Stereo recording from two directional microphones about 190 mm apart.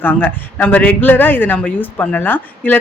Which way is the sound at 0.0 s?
10° left (ahead or behind).